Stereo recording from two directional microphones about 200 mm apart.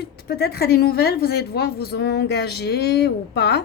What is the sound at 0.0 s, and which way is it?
A woman's voice, 55° left (ahead or behind).